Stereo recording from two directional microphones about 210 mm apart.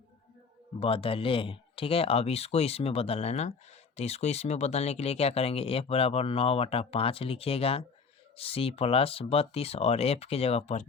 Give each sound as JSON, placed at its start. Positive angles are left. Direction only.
{"t": 0.8, "sound": "speech", "side_deg": 25}